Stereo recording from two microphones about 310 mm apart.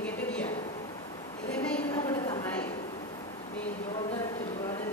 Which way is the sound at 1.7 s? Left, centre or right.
Centre.